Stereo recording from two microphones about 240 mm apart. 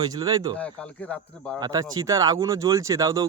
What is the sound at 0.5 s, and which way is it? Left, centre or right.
Speech, centre.